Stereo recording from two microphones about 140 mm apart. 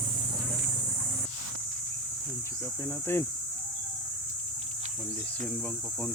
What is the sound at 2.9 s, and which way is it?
Speech, 15° left (ahead or behind).